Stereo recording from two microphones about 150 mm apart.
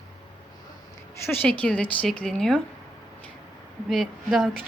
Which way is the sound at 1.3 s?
10° left (ahead or behind).